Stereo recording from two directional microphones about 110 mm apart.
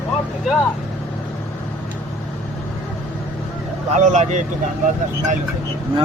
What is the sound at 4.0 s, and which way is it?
Speech, 90° right.